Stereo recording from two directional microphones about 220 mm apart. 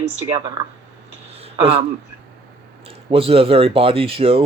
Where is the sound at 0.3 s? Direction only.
20° right (ahead or behind).